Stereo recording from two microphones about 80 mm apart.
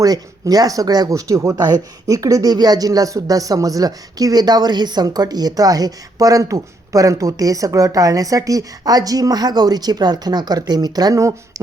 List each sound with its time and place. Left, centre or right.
0.0 s a woman's voice: right